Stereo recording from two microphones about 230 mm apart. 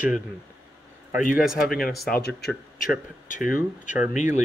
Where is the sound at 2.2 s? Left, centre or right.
Left.